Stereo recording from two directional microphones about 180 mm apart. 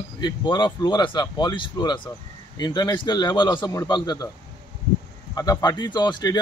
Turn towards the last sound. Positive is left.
turn(degrees=20)  # may be behind; listen again after turning